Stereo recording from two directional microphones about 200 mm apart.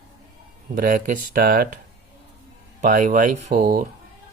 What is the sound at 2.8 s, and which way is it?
Speech, 40° right (ahead or behind).